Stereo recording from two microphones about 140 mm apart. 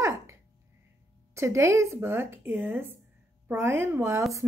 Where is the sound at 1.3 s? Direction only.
20° right (ahead or behind).